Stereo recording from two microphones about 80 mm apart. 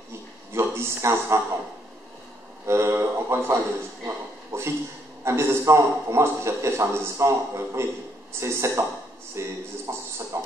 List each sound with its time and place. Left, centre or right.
0.5 s a man's voice: right
2.6 s a man's voice: right